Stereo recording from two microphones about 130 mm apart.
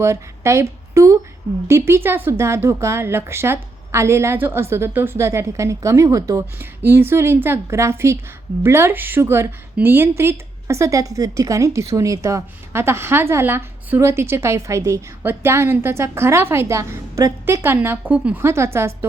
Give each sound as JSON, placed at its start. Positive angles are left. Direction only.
{"t": 0.0, "sound": "a woman's voice", "side_deg": -20}